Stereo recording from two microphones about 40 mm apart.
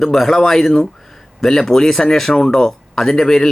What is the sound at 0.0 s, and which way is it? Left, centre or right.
Speech, centre.